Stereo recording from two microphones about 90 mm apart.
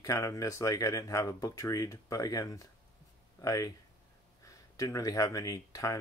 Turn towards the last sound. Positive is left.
turn(degrees=35)  # may be behind; listen again after turning